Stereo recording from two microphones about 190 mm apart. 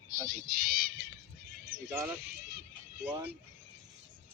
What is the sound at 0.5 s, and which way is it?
Speech, 50° right (ahead or behind).